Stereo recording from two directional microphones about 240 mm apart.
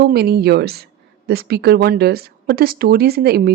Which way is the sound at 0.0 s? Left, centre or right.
Right.